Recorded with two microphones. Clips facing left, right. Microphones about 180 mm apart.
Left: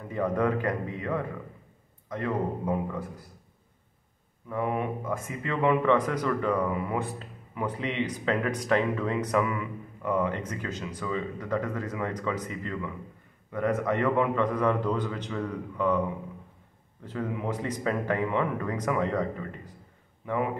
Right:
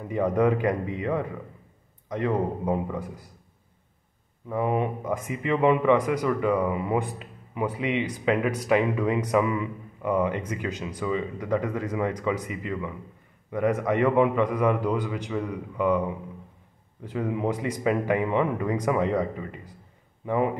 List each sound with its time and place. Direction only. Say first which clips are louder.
0.1 s speech: right 4 dB; 15° right (ahead or behind)
4.5 s speech: right 4 dB; 20° right (ahead or behind)
17.5 s speech: right 4 dB; 10° right (ahead or behind)